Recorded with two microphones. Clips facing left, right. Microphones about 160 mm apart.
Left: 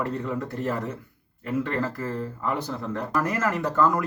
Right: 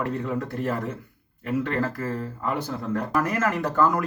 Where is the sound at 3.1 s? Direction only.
5° right (ahead or behind).